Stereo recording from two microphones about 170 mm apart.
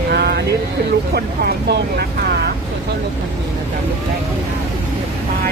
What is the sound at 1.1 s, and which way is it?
Speech, 70° right (ahead or behind).